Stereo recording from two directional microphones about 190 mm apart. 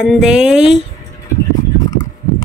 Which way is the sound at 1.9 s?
20° left (ahead or behind).